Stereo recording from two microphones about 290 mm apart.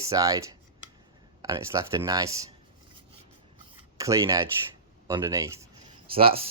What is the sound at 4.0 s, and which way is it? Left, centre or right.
Speech, centre.